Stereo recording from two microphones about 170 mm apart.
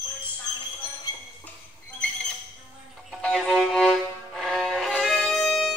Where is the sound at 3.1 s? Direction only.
5° left (ahead or behind).